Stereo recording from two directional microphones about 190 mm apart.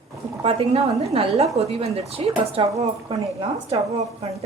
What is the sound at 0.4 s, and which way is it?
Speech, 30° right (ahead or behind).